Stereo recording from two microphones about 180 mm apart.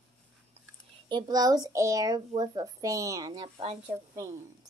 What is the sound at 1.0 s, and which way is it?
A child's voice, 25° right (ahead or behind).